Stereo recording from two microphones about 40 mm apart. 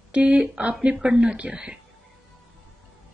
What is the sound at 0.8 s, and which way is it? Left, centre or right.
Speech, centre.